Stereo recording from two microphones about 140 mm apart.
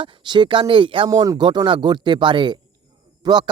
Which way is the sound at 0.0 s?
35° right (ahead or behind).